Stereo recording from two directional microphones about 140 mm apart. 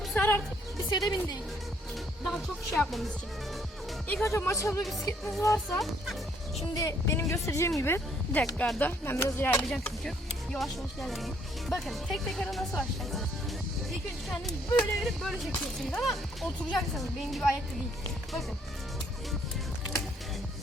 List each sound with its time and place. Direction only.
0.1 s music: 15° left (ahead or behind)
0.9 s a woman's voice: 30° left (ahead or behind)
2.2 s speech: 5° left (ahead or behind)
4.1 s speech: 20° left (ahead or behind); by 13.2 s centre (ahead or behind)
14.3 s speech: centre (ahead or behind)